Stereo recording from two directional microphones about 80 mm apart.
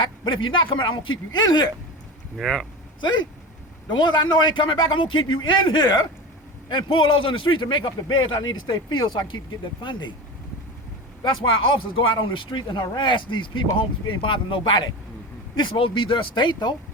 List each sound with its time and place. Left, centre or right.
0.0 s a man's voice: left
2.3 s speech: centre
3.0 s a man's voice: left
6.7 s a man's voice: left
8.0 s a man's voice: left
11.7 s a man's voice: left